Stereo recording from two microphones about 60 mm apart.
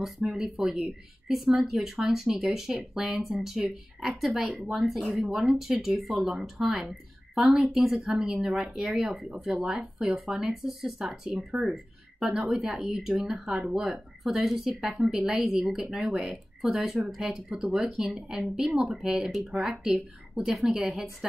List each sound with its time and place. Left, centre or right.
0.0 s speech: centre
9.3 s speech: centre
12.4 s speech: centre